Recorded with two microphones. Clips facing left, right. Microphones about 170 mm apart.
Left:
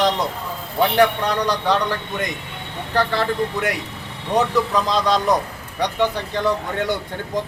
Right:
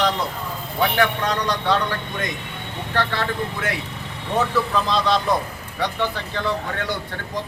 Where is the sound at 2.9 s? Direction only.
15° left (ahead or behind).